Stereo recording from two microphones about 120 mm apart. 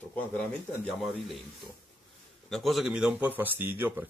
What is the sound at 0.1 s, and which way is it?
Speech, 10° left (ahead or behind).